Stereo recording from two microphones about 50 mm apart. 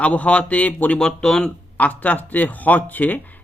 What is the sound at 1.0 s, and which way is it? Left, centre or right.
Speech, centre.